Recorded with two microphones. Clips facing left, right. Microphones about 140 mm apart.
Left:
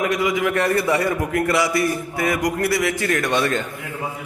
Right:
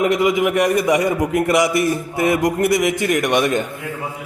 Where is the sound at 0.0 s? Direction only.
25° right (ahead or behind).